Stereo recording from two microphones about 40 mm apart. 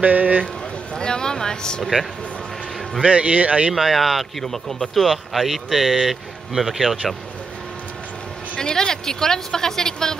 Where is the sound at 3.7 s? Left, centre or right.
Centre.